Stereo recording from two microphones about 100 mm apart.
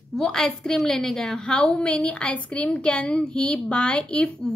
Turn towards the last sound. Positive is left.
turn(degrees=10)  # may be behind; listen again after turning